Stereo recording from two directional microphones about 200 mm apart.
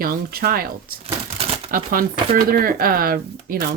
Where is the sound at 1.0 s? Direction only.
30° right (ahead or behind).